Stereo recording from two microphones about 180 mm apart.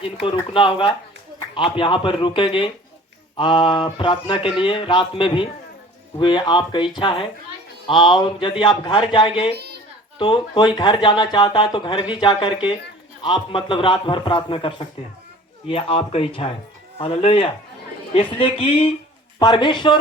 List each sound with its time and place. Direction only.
0.0 s speech: 30° left (ahead or behind)